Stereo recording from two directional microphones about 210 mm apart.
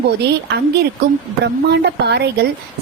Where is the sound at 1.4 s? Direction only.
55° right (ahead or behind).